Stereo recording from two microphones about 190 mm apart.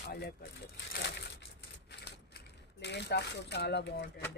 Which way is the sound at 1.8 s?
60° left (ahead or behind).